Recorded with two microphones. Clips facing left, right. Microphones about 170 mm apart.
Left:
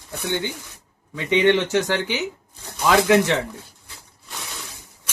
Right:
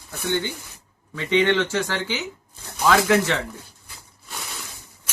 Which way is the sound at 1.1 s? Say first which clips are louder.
Left 2 dB; 20° left (ahead or behind).